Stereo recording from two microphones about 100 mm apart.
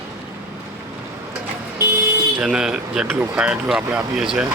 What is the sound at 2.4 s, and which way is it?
Speech, 10° right (ahead or behind).